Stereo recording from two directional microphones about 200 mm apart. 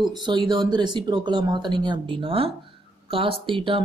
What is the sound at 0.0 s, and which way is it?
Speech, 20° right (ahead or behind).